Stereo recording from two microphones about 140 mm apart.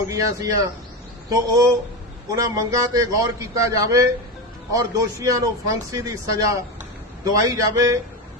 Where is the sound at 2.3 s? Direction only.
25° right (ahead or behind).